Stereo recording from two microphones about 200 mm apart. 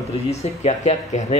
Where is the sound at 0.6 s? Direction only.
35° left (ahead or behind).